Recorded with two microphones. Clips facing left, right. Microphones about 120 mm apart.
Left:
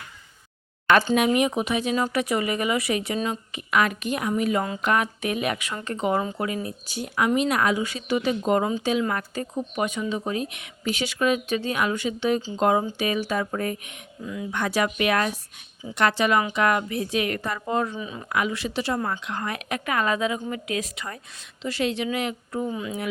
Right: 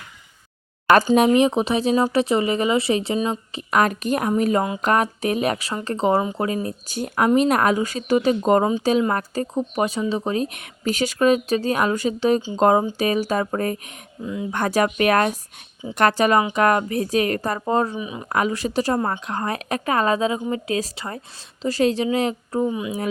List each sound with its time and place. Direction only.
1.1 s speech: 30° right (ahead or behind)
17.9 s speech: 15° right (ahead or behind)
18.3 s speech: 40° right (ahead or behind)
22.6 s speech: 15° right (ahead or behind)